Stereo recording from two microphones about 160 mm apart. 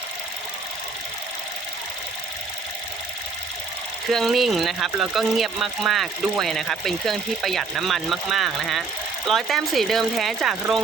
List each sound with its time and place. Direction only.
4.1 s speech: centre (ahead or behind)